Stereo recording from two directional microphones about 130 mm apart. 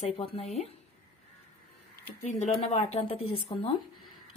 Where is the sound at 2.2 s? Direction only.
55° left (ahead or behind).